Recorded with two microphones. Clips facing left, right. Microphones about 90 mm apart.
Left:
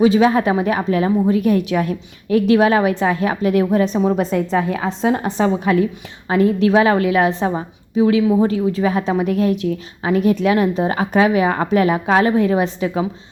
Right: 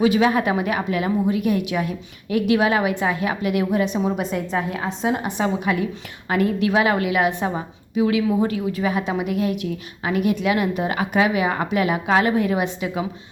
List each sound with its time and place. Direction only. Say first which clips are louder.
0.0 s a woman's voice: left 4 dB; 30° left (ahead or behind)